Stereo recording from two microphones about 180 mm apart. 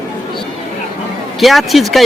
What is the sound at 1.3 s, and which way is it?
Speech, centre (ahead or behind).